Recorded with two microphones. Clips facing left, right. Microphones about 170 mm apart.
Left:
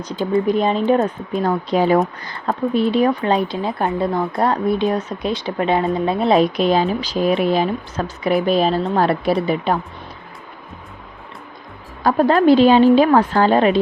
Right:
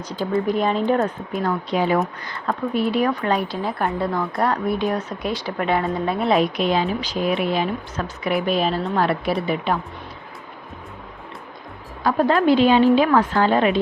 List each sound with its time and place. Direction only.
0.0 s speech: 20° left (ahead or behind)
1.4 s speech: 35° left (ahead or behind)
6.1 s speech: 35° left (ahead or behind)
12.0 s speech: 40° left (ahead or behind)